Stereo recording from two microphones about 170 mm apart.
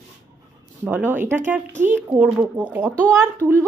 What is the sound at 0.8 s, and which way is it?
A child's voice, 10° right (ahead or behind).